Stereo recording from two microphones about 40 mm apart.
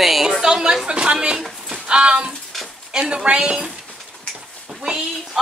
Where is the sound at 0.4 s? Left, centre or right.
Centre.